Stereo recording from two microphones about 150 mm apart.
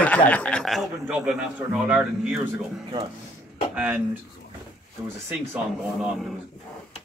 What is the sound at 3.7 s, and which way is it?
Speech, 10° right (ahead or behind).